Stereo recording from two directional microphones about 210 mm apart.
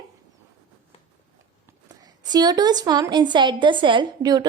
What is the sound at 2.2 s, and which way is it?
A woman's voice, 20° right (ahead or behind).